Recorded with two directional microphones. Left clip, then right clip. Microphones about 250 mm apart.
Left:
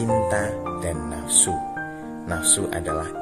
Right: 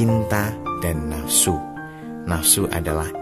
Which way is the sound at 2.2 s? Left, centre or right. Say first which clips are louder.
Right 2 dB; right.